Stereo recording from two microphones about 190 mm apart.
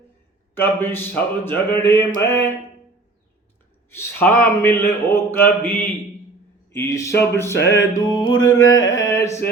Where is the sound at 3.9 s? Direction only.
10° left (ahead or behind).